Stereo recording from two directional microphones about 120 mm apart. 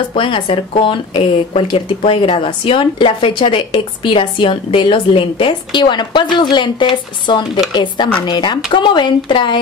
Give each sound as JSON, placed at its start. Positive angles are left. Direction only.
{"t": 0.1, "sound": "a woman's voice", "side_deg": 45}